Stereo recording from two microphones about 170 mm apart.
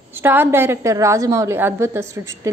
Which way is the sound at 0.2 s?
15° right (ahead or behind).